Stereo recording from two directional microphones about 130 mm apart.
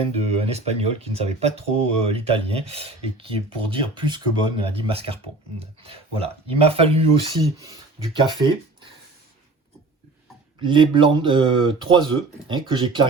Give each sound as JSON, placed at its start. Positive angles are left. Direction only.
{"t": 0.0, "sound": "speech", "side_deg": -50}
{"t": 7.6, "sound": "a sound", "side_deg": -25}
{"t": 8.2, "sound": "speech", "side_deg": -40}
{"t": 10.6, "sound": "speech", "side_deg": -40}